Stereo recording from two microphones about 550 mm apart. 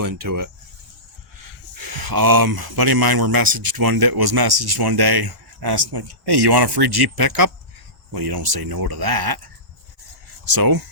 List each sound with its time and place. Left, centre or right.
0.0 s speech: right
10.4 s speech: right